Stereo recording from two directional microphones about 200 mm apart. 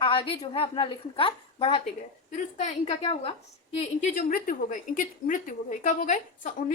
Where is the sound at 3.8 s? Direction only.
40° left (ahead or behind).